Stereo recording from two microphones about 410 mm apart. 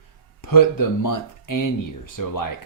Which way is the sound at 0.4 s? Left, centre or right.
Left.